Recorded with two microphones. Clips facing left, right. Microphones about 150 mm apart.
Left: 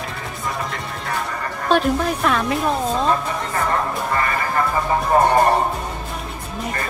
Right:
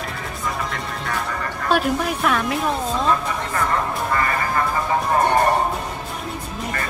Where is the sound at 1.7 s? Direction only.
5° right (ahead or behind).